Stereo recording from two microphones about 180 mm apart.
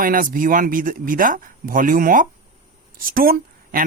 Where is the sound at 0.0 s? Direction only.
50° right (ahead or behind).